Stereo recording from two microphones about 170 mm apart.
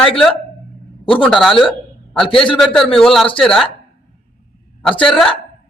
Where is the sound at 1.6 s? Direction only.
5° left (ahead or behind).